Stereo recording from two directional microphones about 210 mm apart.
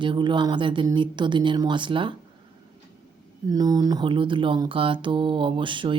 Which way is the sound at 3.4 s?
15° right (ahead or behind).